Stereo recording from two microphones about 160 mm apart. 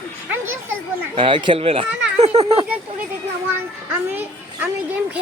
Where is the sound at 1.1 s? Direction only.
30° right (ahead or behind).